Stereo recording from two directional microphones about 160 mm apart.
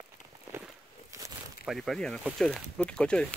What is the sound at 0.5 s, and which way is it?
Walk, 15° right (ahead or behind).